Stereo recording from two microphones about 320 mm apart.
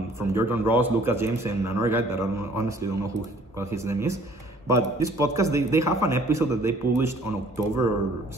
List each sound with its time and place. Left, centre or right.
0.3 s a man's voice: centre